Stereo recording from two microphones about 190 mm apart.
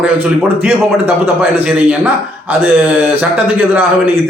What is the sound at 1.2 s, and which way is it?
A man's voice, 10° right (ahead or behind).